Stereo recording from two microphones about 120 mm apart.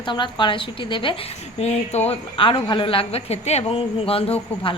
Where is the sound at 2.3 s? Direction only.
45° left (ahead or behind).